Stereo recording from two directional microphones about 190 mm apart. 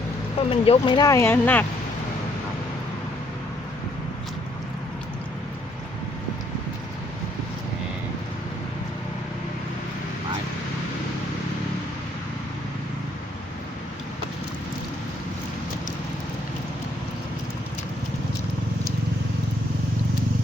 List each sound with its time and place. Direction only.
0.3 s speech: 30° left (ahead or behind); by 1.6 s 10° left (ahead or behind)